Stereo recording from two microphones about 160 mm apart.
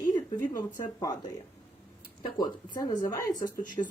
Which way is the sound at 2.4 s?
25° left (ahead or behind).